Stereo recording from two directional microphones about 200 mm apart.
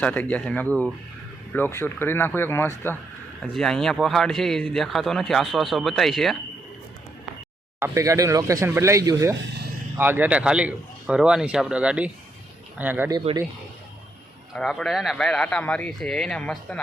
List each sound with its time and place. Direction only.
0.0 s a man's voice: 5° left (ahead or behind)
7.8 s a man's voice: 15° right (ahead or behind)
13.1 s speech: 20° right (ahead or behind)
14.5 s a man's voice: 5° left (ahead or behind)